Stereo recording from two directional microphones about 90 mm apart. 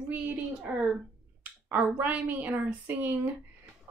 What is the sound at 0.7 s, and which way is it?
A woman's voice, 15° right (ahead or behind).